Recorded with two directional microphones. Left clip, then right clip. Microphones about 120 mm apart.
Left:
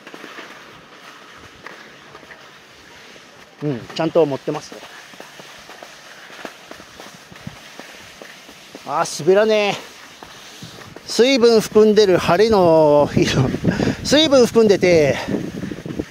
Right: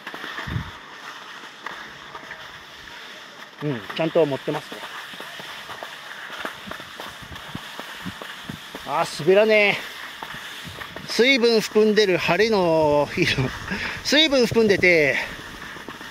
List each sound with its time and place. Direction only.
3.6 s speech: 40° left (ahead or behind)
8.8 s speech: 35° left (ahead or behind)
11.1 s speech: 40° left (ahead or behind)